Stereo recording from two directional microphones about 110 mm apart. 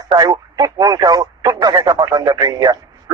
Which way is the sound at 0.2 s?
35° right (ahead or behind).